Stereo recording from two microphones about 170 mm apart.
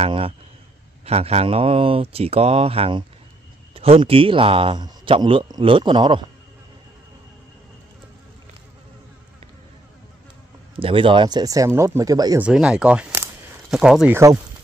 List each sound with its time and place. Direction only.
0.0 s a man's voice: 30° right (ahead or behind)
10.8 s speech: 30° right (ahead or behind)
12.4 s speech: 5° right (ahead or behind)
14.1 s speech: 20° right (ahead or behind)